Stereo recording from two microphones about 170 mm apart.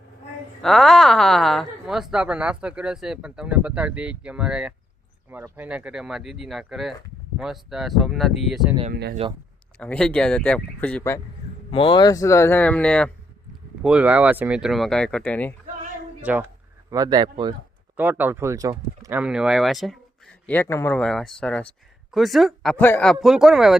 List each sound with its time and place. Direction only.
0.6 s a woman's voice: centre (ahead or behind)
8.9 s speech: 70° right (ahead or behind)
9.7 s speech: 5° left (ahead or behind)
11.7 s speech: 30° left (ahead or behind); by 13.1 s 5° left (ahead or behind)
13.8 s a woman's voice: 5° right (ahead or behind); by 15.5 s 10° left (ahead or behind)
16.2 s speech: 10° right (ahead or behind)
16.9 s speech: 20° right (ahead or behind)
17.9 s speech: 10° right (ahead or behind)
19.2 s a woman's voice: 5° right (ahead or behind)
23.2 s a woman's voice: 5° right (ahead or behind)